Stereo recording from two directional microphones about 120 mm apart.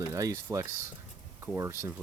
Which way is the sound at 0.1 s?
30° right (ahead or behind).